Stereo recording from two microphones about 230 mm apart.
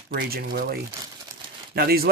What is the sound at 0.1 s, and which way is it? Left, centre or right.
Speech, right.